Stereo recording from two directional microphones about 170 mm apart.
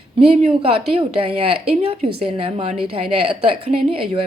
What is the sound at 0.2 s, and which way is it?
A woman's voice, 35° right (ahead or behind).